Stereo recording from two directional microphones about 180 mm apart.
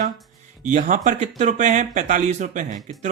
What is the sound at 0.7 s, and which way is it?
Speech, 45° right (ahead or behind).